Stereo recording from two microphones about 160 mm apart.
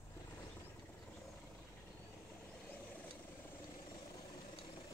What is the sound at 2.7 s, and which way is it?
Vehicle, 10° left (ahead or behind).